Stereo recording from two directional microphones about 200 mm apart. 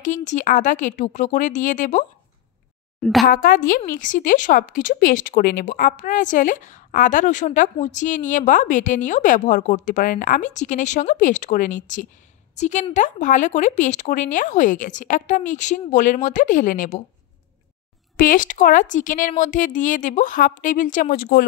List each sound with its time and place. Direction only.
0.0 s a woman's voice: 35° left (ahead or behind)
3.0 s a woman's voice: centre (ahead or behind)
3.3 s a woman's voice: 45° left (ahead or behind)
18.1 s a woman's voice: 45° left (ahead or behind)